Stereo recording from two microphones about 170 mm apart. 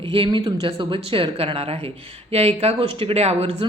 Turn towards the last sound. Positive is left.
turn(degrees=-40)  # may be behind; listen again after turning